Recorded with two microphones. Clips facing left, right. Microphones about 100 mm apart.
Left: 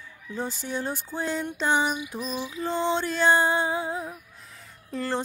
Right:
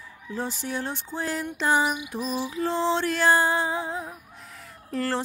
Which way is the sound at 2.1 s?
35° right (ahead or behind).